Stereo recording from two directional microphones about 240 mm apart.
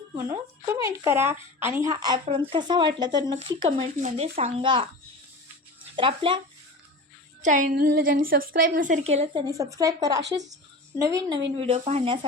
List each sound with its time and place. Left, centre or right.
0.3 s speech: centre
6.0 s speech: right
7.4 s a woman's voice: right; by 11.3 s centre
11.5 s speech: right